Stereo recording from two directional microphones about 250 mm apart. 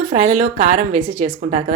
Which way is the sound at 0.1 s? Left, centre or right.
Right.